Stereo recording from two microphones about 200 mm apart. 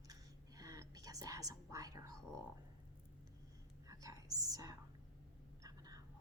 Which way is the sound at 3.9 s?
15° right (ahead or behind).